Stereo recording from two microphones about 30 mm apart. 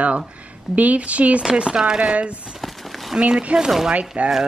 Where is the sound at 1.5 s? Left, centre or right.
Right.